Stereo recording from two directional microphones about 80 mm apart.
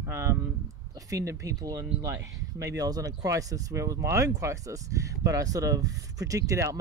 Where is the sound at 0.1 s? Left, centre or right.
Right.